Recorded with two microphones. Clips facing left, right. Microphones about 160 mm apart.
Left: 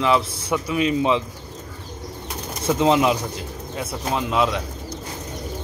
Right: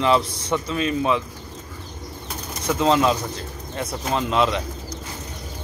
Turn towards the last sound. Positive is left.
turn(degrees=5)  # may be behind; listen again after turning